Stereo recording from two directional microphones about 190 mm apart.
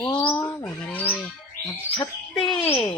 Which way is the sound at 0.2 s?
5° left (ahead or behind).